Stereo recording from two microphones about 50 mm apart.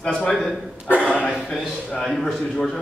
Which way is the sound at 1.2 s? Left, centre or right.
Centre.